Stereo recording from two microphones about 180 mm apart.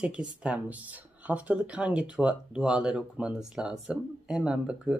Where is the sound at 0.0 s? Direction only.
5° right (ahead or behind).